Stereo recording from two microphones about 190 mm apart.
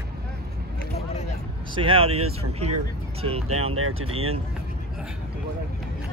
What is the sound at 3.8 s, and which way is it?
Speech, 90° right.